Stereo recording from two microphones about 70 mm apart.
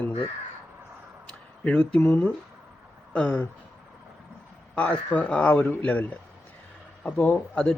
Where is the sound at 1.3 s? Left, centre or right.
Centre.